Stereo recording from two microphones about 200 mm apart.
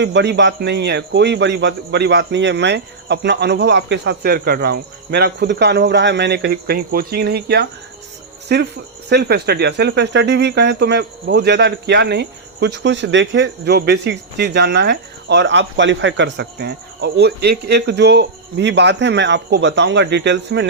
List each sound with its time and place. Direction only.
0.0 s speech: 60° right (ahead or behind)